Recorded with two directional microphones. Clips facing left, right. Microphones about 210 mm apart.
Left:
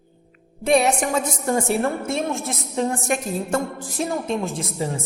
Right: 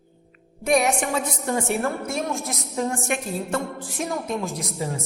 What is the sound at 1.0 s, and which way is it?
Speech, 45° left (ahead or behind).